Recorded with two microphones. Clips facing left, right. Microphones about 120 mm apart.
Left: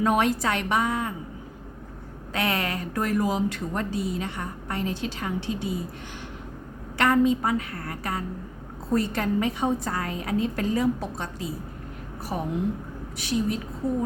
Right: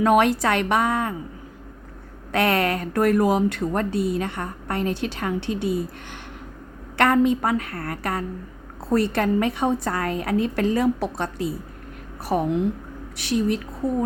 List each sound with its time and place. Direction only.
0.0 s a woman's voice: 75° right (ahead or behind)
2.3 s a woman's voice: 60° right (ahead or behind)
6.9 s a woman's voice: 60° right (ahead or behind)
8.9 s a woman's voice: 75° right (ahead or behind)